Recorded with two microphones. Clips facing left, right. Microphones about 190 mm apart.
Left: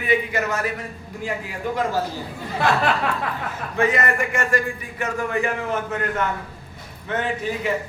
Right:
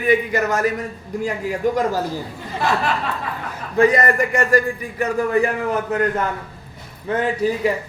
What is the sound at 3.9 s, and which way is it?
A man's voice, 40° right (ahead or behind).